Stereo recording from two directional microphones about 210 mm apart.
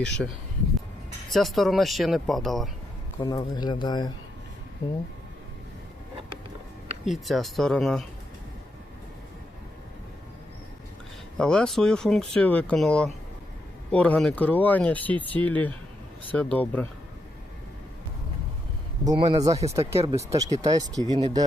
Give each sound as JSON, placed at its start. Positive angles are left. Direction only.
{"t": 0.0, "sound": "speech", "side_deg": 5}
{"t": 1.3, "sound": "speech", "side_deg": 0}
{"t": 3.2, "sound": "speech", "side_deg": 20}
{"t": 7.0, "sound": "speech", "side_deg": 0}
{"t": 11.3, "sound": "speech", "side_deg": 5}
{"t": 19.0, "sound": "speech", "side_deg": -20}